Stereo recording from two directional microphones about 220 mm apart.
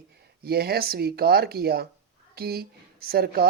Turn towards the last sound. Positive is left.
turn(degrees=-45)  # may be behind; listen again after turning